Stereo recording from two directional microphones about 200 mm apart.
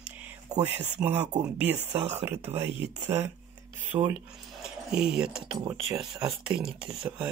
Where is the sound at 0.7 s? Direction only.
10° right (ahead or behind).